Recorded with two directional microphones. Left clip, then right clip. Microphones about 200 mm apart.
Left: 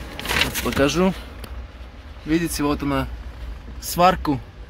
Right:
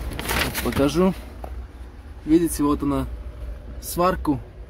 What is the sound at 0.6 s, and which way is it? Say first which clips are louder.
Speech: right 1 dB; 5° right (ahead or behind).